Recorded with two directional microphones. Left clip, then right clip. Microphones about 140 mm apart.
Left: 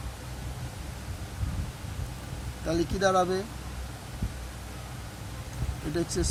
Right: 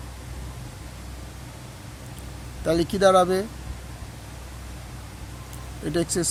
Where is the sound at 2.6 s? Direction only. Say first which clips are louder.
Right 7 dB; 65° right (ahead or behind).